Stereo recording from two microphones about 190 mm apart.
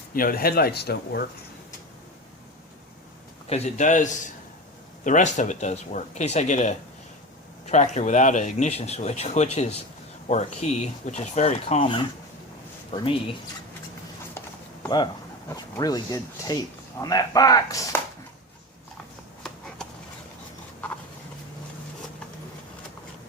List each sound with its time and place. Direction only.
0.1 s speech: 50° left (ahead or behind)
3.4 s speech: 35° left (ahead or behind)
14.8 s speech: 20° left (ahead or behind)